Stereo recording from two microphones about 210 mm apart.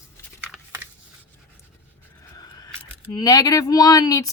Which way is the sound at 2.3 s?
20° left (ahead or behind).